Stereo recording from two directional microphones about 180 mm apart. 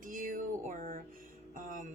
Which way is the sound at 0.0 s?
45° right (ahead or behind).